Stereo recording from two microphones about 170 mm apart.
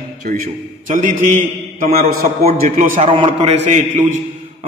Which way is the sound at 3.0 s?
35° right (ahead or behind).